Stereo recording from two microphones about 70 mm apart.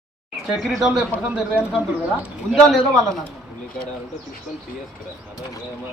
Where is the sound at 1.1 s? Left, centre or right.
Left.